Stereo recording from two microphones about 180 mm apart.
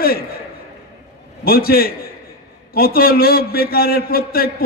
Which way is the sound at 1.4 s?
55° left (ahead or behind).